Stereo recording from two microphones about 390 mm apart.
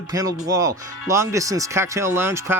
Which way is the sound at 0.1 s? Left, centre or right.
Centre.